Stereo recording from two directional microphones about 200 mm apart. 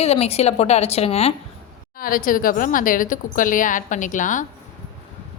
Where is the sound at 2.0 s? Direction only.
45° left (ahead or behind).